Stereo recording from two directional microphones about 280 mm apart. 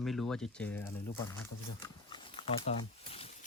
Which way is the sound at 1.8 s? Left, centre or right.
Centre.